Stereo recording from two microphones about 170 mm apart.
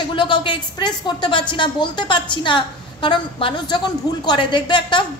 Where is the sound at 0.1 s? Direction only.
30° left (ahead or behind).